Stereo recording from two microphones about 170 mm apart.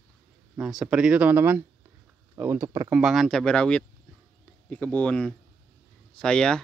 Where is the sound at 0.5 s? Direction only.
5° right (ahead or behind).